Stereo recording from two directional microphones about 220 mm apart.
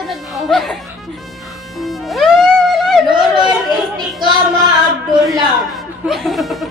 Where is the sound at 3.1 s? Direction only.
20° right (ahead or behind).